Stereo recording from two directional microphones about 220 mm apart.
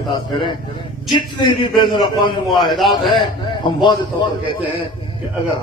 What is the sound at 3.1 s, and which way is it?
A man's voice, 20° left (ahead or behind).